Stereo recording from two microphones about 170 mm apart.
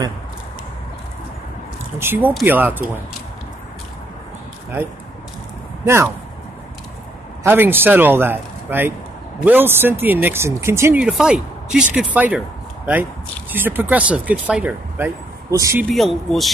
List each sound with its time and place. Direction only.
2.0 s speech: 10° right (ahead or behind)
5.9 s speech: 15° right (ahead or behind)
7.4 s speech: 10° right (ahead or behind)
11.0 s speech: 5° right (ahead or behind)
15.8 s speech: centre (ahead or behind)